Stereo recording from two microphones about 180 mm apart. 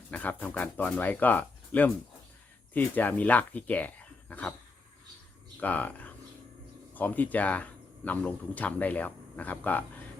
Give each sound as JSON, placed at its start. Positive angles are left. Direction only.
{"t": 0.1, "sound": "speech", "side_deg": 10}
{"t": 5.5, "sound": "speech", "side_deg": 10}